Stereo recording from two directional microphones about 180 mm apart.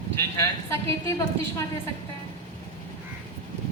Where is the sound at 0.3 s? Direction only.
15° left (ahead or behind).